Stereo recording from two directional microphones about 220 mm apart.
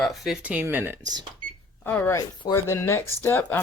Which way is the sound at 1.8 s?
10° left (ahead or behind).